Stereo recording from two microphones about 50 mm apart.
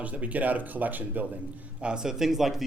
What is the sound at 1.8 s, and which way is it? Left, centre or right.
Speech, centre.